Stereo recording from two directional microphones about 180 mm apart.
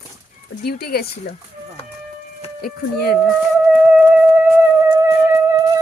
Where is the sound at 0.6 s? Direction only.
60° left (ahead or behind).